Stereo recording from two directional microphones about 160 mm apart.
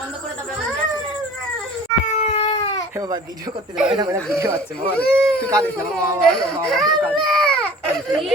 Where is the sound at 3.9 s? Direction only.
20° right (ahead or behind).